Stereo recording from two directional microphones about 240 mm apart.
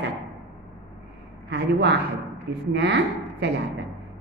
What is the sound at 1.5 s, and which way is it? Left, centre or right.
A woman's voice, right.